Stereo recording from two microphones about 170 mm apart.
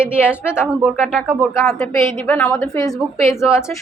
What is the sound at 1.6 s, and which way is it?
A woman's voice, 15° left (ahead or behind).